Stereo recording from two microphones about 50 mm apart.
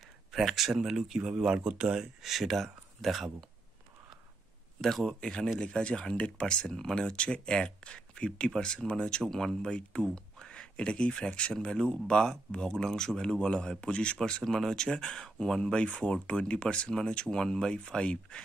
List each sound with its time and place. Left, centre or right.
0.3 s speech: centre; by 2.0 s right
2.2 s speech: centre
4.8 s speech: centre
5.6 s speech: centre
14.4 s speech: centre